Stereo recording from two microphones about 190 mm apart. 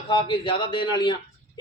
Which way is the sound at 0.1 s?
25° left (ahead or behind).